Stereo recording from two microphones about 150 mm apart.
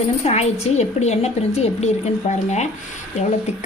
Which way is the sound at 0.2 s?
45° left (ahead or behind).